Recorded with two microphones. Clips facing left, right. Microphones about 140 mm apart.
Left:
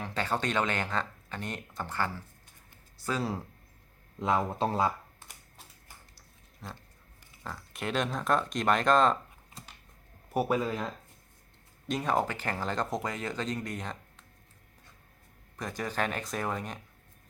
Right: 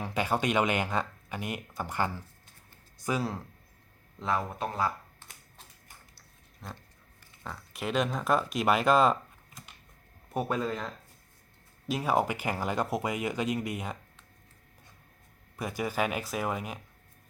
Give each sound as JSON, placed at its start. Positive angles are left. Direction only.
{"t": 0.0, "sound": "speech", "side_deg": -10}
{"t": 4.2, "sound": "speech", "side_deg": 20}
{"t": 6.6, "sound": "speech", "side_deg": 0}
{"t": 10.2, "sound": "speech", "side_deg": 5}
{"t": 11.9, "sound": "speech", "side_deg": -5}
{"t": 15.5, "sound": "speech", "side_deg": -10}